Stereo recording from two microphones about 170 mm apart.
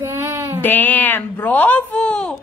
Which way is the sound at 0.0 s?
15° right (ahead or behind).